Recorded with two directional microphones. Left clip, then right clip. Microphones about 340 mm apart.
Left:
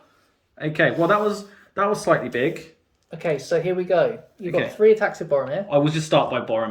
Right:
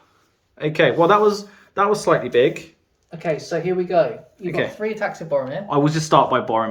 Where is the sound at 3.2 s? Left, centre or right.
Left.